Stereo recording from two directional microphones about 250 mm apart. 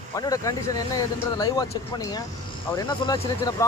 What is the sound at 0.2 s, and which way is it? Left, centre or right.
Speech, centre.